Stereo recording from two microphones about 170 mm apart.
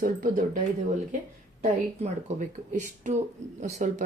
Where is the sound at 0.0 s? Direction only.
50° right (ahead or behind).